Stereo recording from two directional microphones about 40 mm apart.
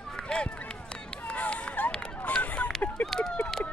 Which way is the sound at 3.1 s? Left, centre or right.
Centre.